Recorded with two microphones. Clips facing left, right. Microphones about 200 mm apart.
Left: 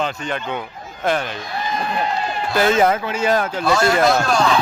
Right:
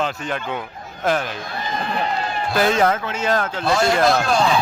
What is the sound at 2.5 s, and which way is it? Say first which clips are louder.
Speech: left 2 dB; centre (ahead or behind).